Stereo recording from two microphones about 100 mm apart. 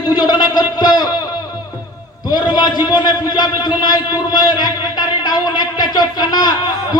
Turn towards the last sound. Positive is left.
turn(degrees=45)  # may be behind; listen again after turning